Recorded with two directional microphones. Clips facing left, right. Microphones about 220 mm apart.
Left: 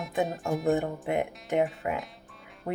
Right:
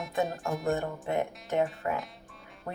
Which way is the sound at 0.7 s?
15° left (ahead or behind).